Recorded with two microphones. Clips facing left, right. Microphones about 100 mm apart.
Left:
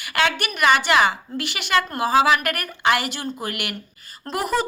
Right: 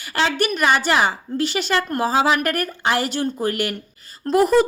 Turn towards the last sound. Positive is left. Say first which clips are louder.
# right 8 dB
turn(degrees=-40)  # may be behind; listen again after turning